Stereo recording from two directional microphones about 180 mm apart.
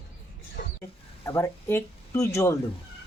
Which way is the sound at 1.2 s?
15° left (ahead or behind).